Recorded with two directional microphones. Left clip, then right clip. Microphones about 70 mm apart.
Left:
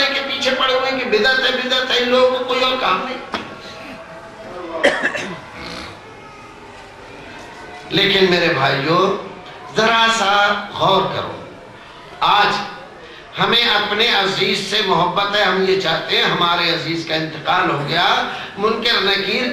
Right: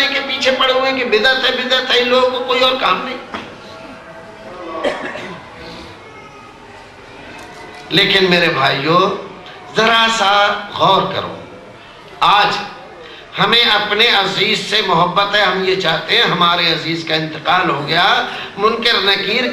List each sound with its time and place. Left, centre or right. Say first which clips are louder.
0.1 s speech: right 3 dB; right
4.8 s cough: left 5 dB; left
7.9 s a man's voice: right 2 dB; right